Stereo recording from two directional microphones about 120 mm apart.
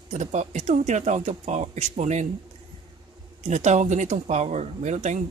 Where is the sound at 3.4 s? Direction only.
75° right (ahead or behind).